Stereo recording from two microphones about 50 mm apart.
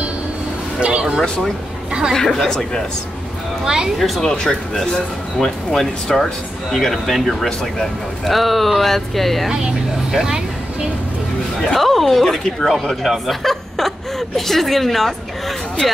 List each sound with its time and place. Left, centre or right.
0.7 s a sound: right
1.2 s speech: centre
3.6 s speech: centre
4.0 s speech: centre
10.1 s speech: centre
11.6 s speech: centre